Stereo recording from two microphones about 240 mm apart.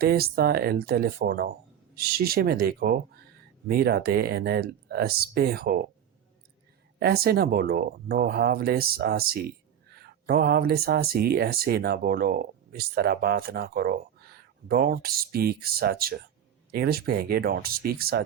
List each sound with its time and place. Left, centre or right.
0.0 s speech: right
7.0 s speech: right